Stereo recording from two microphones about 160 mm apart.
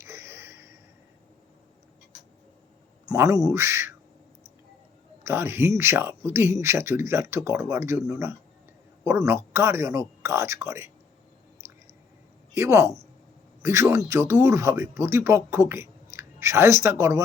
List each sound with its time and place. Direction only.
0.0 s a sound: 15° right (ahead or behind)
3.1 s speech: 20° right (ahead or behind)
5.2 s speech: 15° right (ahead or behind)
12.5 s a man's voice: 20° right (ahead or behind)